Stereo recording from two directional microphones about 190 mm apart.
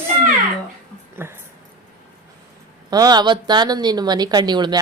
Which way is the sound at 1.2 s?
10° right (ahead or behind).